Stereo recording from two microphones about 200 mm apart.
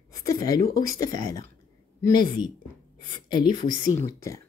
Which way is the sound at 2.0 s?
20° left (ahead or behind).